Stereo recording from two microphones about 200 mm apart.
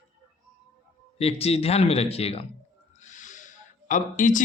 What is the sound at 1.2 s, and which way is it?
Speech, 30° left (ahead or behind).